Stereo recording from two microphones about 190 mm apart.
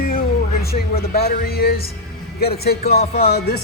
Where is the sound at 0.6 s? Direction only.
55° left (ahead or behind).